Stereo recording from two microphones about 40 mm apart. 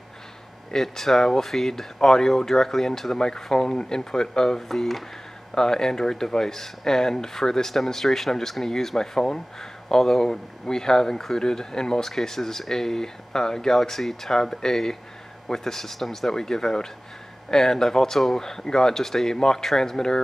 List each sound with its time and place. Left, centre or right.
0.7 s speech: centre